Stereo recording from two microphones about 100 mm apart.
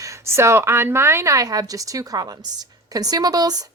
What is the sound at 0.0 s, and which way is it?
A woman's voice, 30° right (ahead or behind).